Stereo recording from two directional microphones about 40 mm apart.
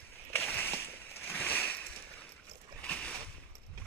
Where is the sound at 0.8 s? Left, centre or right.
Left.